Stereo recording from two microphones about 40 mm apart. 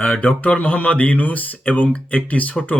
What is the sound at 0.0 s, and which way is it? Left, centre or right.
Speech, left.